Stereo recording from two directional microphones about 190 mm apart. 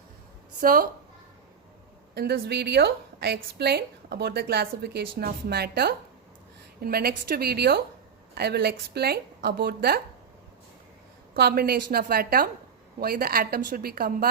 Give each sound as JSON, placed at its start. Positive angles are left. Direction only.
{"t": 0.6, "sound": "a woman's voice", "side_deg": -50}
{"t": 2.1, "sound": "a woman's voice", "side_deg": -55}
{"t": 11.3, "sound": "a woman's voice", "side_deg": -55}